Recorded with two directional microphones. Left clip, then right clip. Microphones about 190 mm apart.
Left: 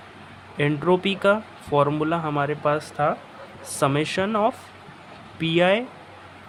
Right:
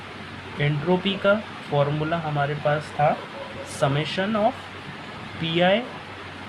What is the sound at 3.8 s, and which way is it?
Speech, 40° left (ahead or behind).